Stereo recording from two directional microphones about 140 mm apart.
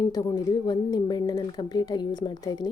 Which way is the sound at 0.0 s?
25° left (ahead or behind).